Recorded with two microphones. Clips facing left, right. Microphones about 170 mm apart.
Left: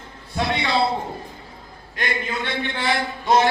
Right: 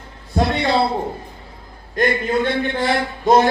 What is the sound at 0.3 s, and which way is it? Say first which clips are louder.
Speech: right 5 dB; 45° right (ahead or behind).